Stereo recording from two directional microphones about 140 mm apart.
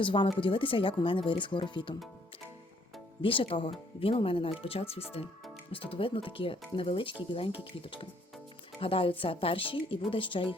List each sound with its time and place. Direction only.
0.0 s speech: 35° left (ahead or behind)
3.2 s speech: 40° left (ahead or behind)